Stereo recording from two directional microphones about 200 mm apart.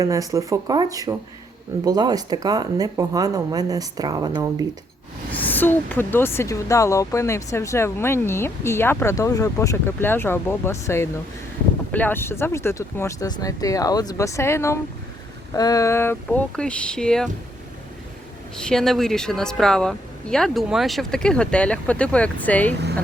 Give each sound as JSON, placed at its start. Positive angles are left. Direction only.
{"t": 0.0, "sound": "speech", "side_deg": -15}
{"t": 5.4, "sound": "speech", "side_deg": 10}
{"t": 18.6, "sound": "speech", "side_deg": 5}